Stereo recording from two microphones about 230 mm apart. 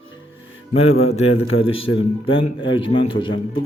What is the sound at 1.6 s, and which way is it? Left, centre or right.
Speech, left.